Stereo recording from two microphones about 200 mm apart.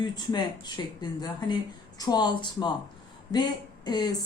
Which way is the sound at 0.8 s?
20° left (ahead or behind).